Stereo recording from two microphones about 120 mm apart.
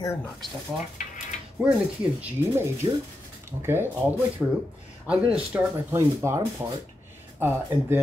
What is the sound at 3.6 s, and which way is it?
Speech, 20° right (ahead or behind).